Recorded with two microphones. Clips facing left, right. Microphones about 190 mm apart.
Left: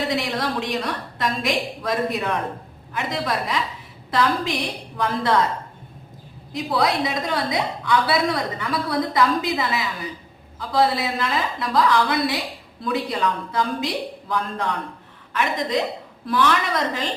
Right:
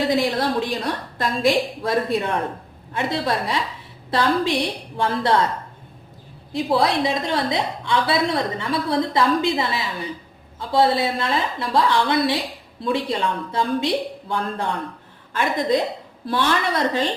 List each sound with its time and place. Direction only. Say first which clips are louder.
0.2 s a woman's voice: right 4 dB; 30° right (ahead or behind)
6.5 s a woman's voice: right 2 dB; 30° right (ahead or behind)